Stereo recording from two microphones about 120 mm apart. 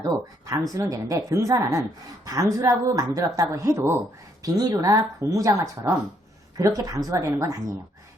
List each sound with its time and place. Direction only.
0.0 s speech: 30° right (ahead or behind)